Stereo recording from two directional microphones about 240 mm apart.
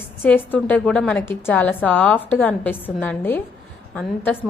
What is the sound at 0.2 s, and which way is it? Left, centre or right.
A woman's voice, centre.